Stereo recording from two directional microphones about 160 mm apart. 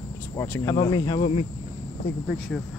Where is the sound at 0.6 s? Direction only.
25° left (ahead or behind).